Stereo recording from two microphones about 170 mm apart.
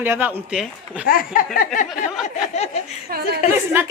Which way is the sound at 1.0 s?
55° left (ahead or behind).